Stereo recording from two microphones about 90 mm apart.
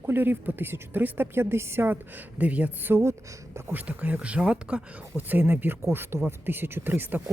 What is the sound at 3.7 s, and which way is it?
Speech, 20° right (ahead or behind).